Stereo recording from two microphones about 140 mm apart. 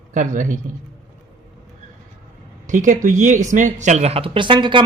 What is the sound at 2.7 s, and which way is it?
A man's voice, 65° right (ahead or behind).